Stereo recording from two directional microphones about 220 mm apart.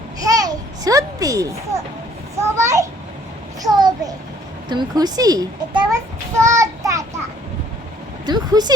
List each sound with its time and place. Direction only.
0.2 s babbling: 15° right (ahead or behind)
2.4 s a child's voice: 10° right (ahead or behind)
6.4 s child singing: 15° right (ahead or behind)
8.3 s speech: 20° right (ahead or behind)